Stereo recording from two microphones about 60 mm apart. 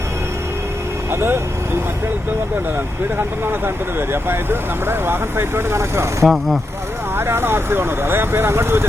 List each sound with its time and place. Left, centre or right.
1.1 s speech: right
4.1 s speech: right
6.2 s speech: centre
7.2 s speech: right